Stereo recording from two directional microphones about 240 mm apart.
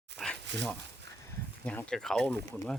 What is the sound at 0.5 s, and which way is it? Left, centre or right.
Speech, right.